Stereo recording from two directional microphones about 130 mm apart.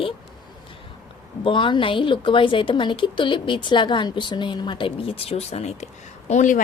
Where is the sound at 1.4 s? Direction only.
40° left (ahead or behind).